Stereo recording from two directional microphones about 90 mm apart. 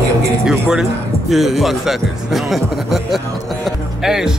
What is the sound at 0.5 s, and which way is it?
Speech, 5° right (ahead or behind).